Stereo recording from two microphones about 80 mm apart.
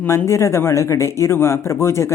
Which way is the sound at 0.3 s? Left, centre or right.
Left.